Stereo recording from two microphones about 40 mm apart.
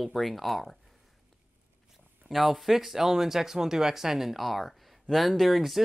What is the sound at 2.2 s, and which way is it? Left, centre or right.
Speech, centre.